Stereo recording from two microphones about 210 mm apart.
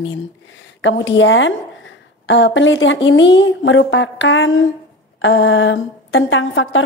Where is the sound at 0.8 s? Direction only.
60° left (ahead or behind).